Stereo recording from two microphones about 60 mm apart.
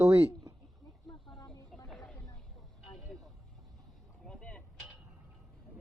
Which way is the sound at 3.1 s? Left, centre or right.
Centre.